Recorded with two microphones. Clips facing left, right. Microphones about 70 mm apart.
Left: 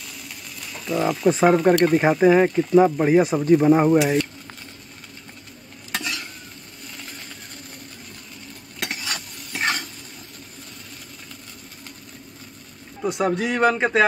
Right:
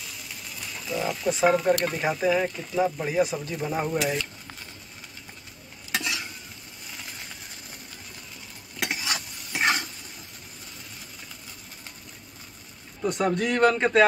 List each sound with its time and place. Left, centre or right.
0.9 s frying: centre
1.2 s speech: left
4.0 s stir: centre
5.9 s stir: centre
8.7 s stir: centre
13.0 s a man's voice: centre